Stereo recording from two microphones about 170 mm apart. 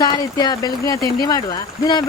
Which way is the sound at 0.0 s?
25° left (ahead or behind).